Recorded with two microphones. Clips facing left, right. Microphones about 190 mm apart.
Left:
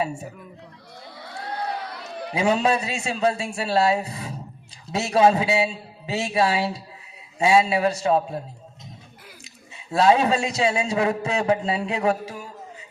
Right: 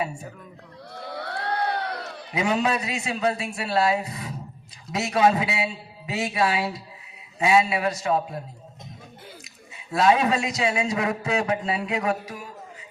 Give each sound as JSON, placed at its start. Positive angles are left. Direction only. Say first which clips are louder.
{"t": 1.1, "sound": "a sound", "louder": "right 4 dB", "side_deg": -70}
{"t": 2.3, "sound": "a man's voice", "louder": "left 3 dB", "side_deg": 30}
{"t": 9.7, "sound": "a man's voice", "louder": "left 2 dB", "side_deg": 25}